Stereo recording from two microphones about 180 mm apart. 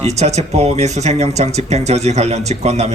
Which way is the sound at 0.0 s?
40° right (ahead or behind).